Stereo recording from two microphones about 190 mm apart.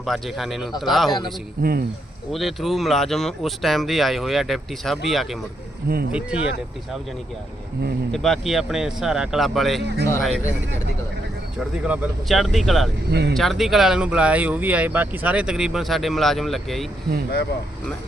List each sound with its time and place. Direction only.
0.0 s speech: centre (ahead or behind)
1.6 s speech: 50° right (ahead or behind)
2.3 s speech: centre (ahead or behind)
8.1 s speech: centre (ahead or behind)
11.9 s speech: centre (ahead or behind)
13.1 s speech: 60° right (ahead or behind)
13.3 s speech: centre (ahead or behind)